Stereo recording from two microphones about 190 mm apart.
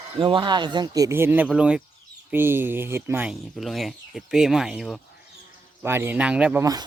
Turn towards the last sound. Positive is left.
turn(degrees=-20)  # may be behind; listen again after turning